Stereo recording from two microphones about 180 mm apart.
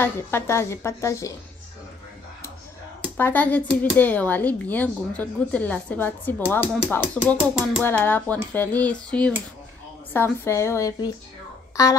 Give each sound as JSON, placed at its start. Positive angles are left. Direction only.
{"t": 0.0, "sound": "speech", "side_deg": 15}
{"t": 3.2, "sound": "speech", "side_deg": 10}